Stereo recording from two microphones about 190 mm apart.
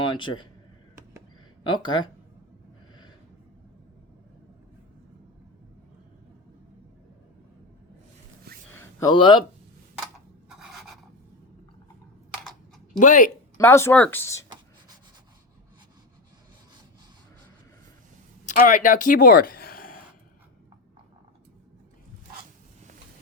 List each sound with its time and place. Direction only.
0.0 s a man's voice: 25° left (ahead or behind)
1.6 s speech: 25° left (ahead or behind)
8.7 s a sound: 15° left (ahead or behind)
9.1 s speech: 25° left (ahead or behind)
10.6 s a sound: centre (ahead or behind)
13.0 s speech: 45° left (ahead or behind)
13.6 s speech: 15° left (ahead or behind)
18.4 s speech: 45° left (ahead or behind)